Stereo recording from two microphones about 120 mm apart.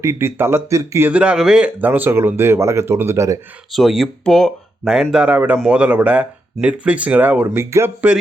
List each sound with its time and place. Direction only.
0.0 s speech: 20° right (ahead or behind)
3.7 s speech: centre (ahead or behind)
5.1 s a man's voice: 10° right (ahead or behind)